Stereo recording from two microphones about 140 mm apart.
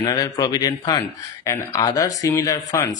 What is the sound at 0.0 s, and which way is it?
Speech, 25° left (ahead or behind).